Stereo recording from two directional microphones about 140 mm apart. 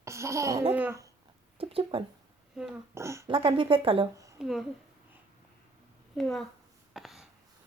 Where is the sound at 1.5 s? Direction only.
45° right (ahead or behind).